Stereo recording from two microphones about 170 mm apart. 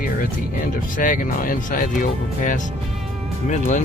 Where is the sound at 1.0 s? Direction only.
50° left (ahead or behind).